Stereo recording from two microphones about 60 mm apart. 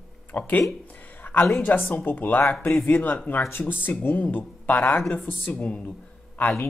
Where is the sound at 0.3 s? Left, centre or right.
Left.